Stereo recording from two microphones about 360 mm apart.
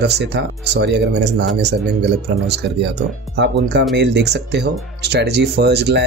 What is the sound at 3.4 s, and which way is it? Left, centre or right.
Speech, right.